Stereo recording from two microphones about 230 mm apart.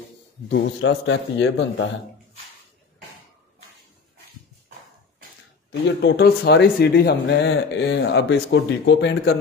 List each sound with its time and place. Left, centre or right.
0.5 s speech: left
5.7 s speech: left